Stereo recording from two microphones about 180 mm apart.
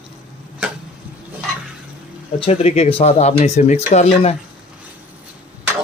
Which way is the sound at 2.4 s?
35° left (ahead or behind).